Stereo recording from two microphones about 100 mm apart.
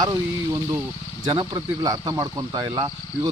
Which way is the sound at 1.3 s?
60° right (ahead or behind).